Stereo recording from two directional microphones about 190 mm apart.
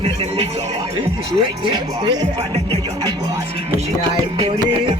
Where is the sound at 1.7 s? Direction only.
25° right (ahead or behind).